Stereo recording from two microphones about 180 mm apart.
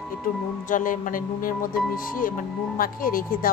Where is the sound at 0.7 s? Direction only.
45° left (ahead or behind).